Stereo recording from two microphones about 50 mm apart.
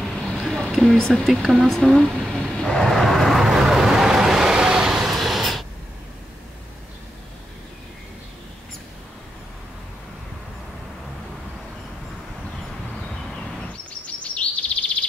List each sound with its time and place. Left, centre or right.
0.0 s a sound: centre
1.2 s speech: centre
1.6 s speech: centre
2.3 s vehicle: centre
3.3 s vehicle: centre
14.0 s chirp: left